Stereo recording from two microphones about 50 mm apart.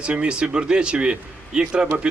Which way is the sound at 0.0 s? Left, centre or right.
Right.